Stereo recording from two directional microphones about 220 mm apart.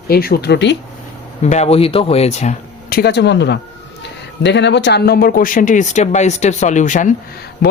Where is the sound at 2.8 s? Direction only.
45° left (ahead or behind).